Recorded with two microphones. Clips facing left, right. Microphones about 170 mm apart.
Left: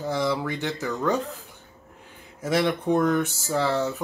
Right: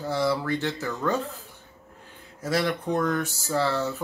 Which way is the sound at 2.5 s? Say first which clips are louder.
Left 3 dB; 20° left (ahead or behind).